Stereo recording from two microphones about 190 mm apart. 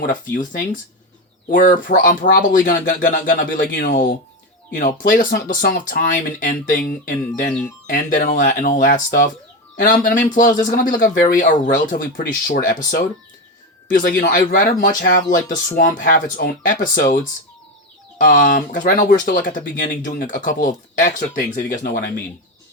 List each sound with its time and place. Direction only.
0.0 s speech: 45° left (ahead or behind)
18.2 s speech: 45° left (ahead or behind)